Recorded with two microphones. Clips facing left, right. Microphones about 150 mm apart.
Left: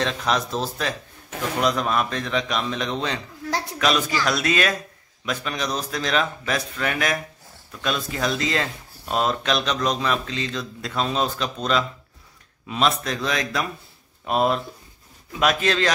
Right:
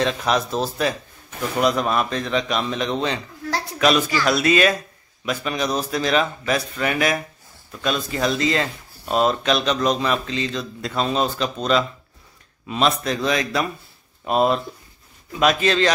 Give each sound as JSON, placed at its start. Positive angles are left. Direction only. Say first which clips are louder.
{"t": 0.0, "sound": "speech", "louder": "right 3 dB", "side_deg": -5}
{"t": 4.2, "sound": "speech", "louder": "right 5 dB", "side_deg": -5}